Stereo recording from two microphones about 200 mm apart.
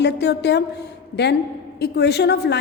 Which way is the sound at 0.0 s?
55° left (ahead or behind).